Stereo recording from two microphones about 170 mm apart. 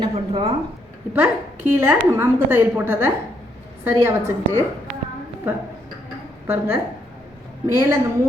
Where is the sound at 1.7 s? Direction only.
10° right (ahead or behind).